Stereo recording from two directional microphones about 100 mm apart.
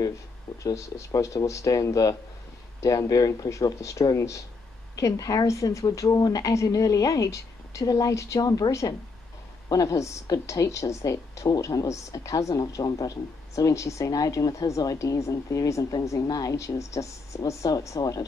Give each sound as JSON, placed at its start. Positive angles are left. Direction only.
{"t": 0.7, "sound": "speech", "side_deg": 35}